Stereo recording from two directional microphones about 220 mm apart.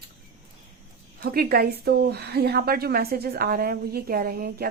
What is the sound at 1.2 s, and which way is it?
A woman's voice, 45° right (ahead or behind).